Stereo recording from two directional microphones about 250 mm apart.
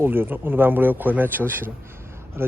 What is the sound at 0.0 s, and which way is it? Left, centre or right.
Speech, centre.